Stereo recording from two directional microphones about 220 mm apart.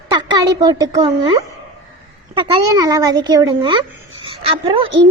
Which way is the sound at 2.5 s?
15° right (ahead or behind).